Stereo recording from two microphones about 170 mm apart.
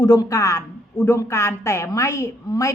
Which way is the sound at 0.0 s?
20° left (ahead or behind).